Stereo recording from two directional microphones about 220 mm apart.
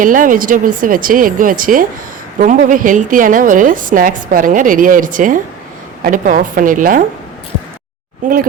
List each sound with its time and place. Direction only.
0.0 s a woman's voice: 35° right (ahead or behind)